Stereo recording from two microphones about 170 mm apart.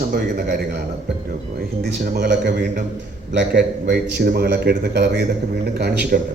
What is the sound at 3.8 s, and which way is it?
A man's voice, 70° right (ahead or behind).